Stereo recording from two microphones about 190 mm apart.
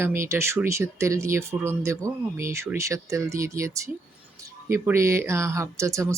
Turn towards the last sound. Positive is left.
turn(degrees=-15)  # may be behind; listen again after turning